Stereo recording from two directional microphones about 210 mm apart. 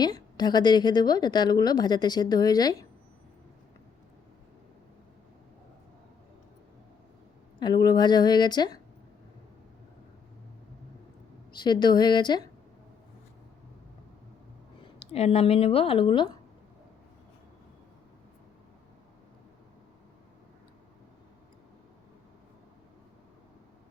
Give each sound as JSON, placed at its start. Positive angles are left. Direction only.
{"t": 0.0, "sound": "a woman's voice", "side_deg": 20}
{"t": 7.6, "sound": "a woman's voice", "side_deg": 20}
{"t": 11.5, "sound": "a woman's voice", "side_deg": 20}
{"t": 14.9, "sound": "a woman's voice", "side_deg": 30}